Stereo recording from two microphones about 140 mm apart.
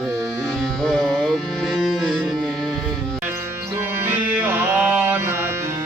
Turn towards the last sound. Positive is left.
turn(degrees=-15)  # may be behind; listen again after turning